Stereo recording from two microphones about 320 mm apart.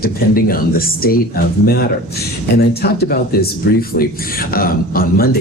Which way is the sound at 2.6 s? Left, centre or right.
Left.